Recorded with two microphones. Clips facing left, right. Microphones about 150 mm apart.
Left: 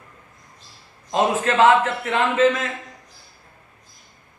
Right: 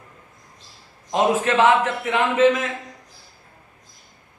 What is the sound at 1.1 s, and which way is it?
A man's voice, 15° right (ahead or behind).